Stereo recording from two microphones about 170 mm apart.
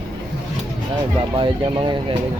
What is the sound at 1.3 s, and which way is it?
Speech, 30° right (ahead or behind).